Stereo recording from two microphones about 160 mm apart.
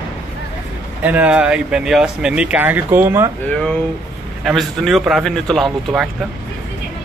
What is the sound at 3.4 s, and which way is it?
Speech, 5° left (ahead or behind).